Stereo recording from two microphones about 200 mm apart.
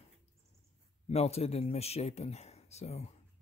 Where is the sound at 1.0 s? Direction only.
30° left (ahead or behind).